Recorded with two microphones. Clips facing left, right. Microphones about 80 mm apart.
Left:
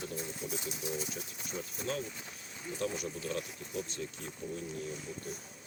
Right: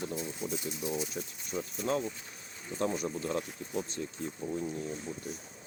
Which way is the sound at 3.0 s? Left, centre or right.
Right.